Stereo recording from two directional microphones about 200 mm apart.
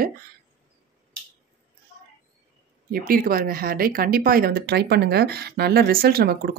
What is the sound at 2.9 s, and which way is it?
Speech, 45° right (ahead or behind).